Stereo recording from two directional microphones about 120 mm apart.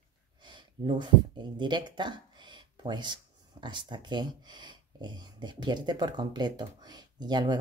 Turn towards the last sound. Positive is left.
turn(degrees=-35)  # may be behind; listen again after turning